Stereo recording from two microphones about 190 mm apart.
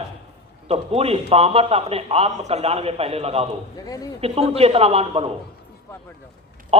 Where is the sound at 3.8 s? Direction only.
20° left (ahead or behind).